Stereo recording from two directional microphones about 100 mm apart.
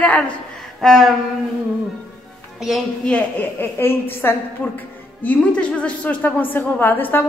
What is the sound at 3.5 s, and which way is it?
A woman's voice, 20° left (ahead or behind).